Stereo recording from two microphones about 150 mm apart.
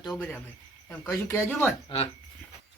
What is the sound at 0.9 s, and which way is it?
Speech, 15° left (ahead or behind).